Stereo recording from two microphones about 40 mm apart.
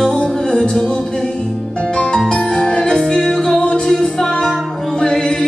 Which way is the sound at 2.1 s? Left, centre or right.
Centre.